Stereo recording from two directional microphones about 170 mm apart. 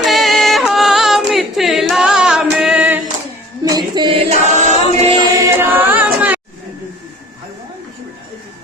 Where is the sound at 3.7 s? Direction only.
25° right (ahead or behind); by 4.8 s 40° right (ahead or behind).